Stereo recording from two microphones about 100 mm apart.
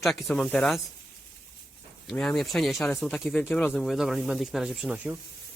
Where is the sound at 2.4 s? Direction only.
Centre (ahead or behind).